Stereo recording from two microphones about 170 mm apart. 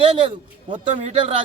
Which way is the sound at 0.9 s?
40° right (ahead or behind).